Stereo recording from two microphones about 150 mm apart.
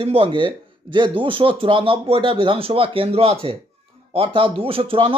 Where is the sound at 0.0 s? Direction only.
35° right (ahead or behind).